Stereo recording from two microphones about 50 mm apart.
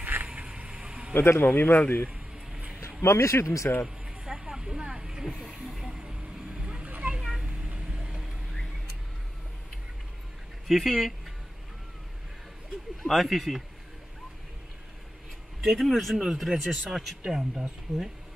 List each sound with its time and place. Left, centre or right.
0.0 s vehicle: right
0.3 s vehicle: centre
1.1 s speech: left
2.8 s speech: left
3.8 s vehicle: centre
5.7 s vehicle: centre
5.9 s vehicle: centre
7.2 s cat: centre
7.4 s cat: right
7.9 s vehicle: centre
10.7 s speech: centre
13.0 s speech: centre
15.6 s speech: centre